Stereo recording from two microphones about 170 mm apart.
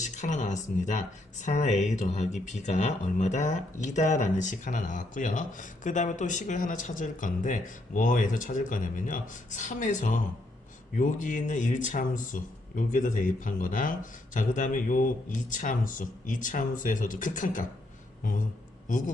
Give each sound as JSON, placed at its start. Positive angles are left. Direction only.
{"t": 0.0, "sound": "speech", "side_deg": 45}